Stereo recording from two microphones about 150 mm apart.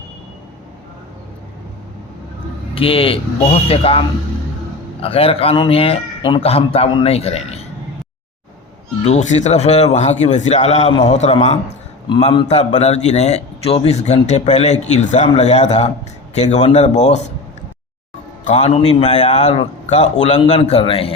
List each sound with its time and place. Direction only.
2.7 s speech: 35° left (ahead or behind)
5.0 s speech: 40° left (ahead or behind)
9.0 s a man's voice: 50° left (ahead or behind)
18.4 s a man's voice: 45° left (ahead or behind)